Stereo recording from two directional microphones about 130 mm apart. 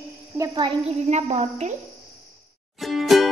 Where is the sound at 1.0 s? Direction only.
60° right (ahead or behind).